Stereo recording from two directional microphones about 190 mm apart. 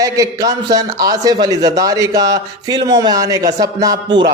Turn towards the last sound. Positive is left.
turn(degrees=-20)  # may be behind; listen again after turning